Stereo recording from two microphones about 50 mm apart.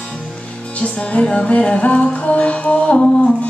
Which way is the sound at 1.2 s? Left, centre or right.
Centre.